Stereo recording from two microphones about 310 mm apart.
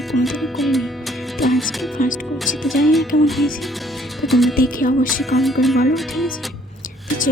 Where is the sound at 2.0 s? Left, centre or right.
Left.